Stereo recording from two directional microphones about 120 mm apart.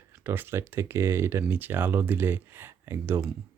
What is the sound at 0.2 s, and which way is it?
Speech, 20° right (ahead or behind).